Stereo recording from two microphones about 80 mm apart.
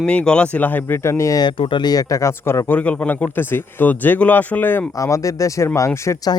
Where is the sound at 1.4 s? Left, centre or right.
Left.